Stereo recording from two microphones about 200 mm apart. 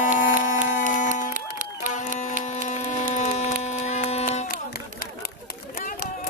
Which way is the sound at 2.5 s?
35° left (ahead or behind).